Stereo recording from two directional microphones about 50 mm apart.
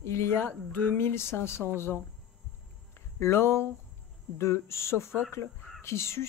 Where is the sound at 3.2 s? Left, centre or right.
Left.